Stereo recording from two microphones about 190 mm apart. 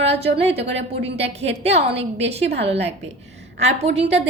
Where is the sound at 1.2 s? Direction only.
35° right (ahead or behind).